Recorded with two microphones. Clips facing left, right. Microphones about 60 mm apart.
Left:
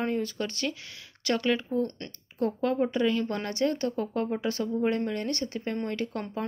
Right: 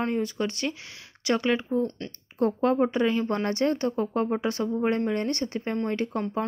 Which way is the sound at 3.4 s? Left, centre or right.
Right.